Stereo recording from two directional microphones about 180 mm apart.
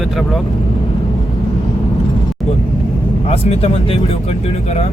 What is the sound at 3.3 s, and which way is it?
Speech, 35° left (ahead or behind).